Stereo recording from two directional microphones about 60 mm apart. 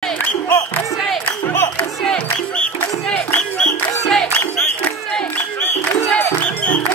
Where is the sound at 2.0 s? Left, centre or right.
Centre.